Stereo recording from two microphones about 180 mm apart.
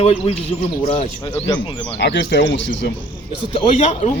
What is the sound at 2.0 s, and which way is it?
Speech, 75° left (ahead or behind).